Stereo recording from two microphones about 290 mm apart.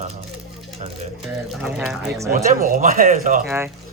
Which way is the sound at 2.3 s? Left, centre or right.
Right.